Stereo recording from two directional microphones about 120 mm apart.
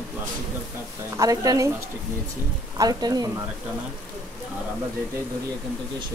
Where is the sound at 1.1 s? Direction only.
30° right (ahead or behind).